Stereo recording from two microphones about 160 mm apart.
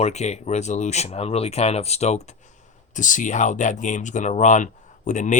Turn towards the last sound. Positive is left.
turn(degrees=50)  # may be behind; listen again after turning